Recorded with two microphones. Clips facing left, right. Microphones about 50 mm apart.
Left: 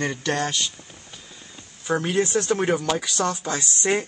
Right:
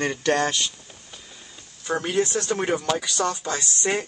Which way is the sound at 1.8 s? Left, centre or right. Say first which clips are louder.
Left 1 dB; centre.